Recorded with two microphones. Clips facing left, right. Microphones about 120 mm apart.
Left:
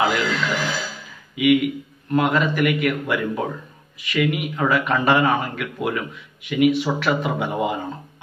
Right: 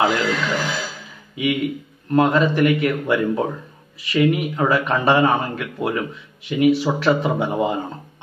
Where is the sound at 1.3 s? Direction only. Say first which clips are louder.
Left 4 dB; 30° right (ahead or behind).